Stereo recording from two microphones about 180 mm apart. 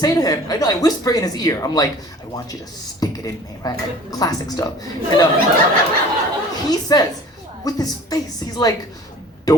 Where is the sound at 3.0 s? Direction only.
20° left (ahead or behind).